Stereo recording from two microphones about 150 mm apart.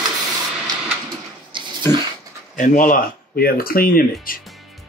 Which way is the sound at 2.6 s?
65° left (ahead or behind).